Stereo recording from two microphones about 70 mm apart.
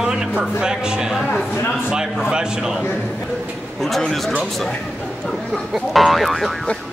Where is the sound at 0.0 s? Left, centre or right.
Centre.